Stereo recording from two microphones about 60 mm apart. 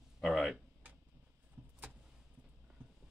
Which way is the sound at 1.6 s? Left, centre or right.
Right.